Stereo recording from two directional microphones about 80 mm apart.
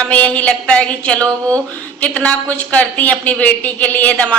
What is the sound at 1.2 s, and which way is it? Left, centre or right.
Speech, right.